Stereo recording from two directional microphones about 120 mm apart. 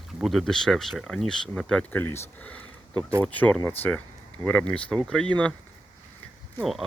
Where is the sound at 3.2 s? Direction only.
10° left (ahead or behind).